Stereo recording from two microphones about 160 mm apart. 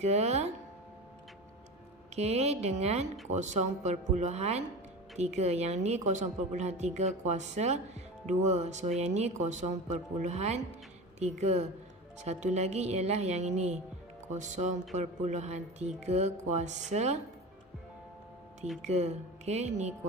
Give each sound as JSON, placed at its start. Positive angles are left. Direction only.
{"t": 0.0, "sound": "a woman's voice", "side_deg": -45}
{"t": 2.1, "sound": "a woman's voice", "side_deg": -40}
{"t": 18.8, "sound": "a woman's voice", "side_deg": -45}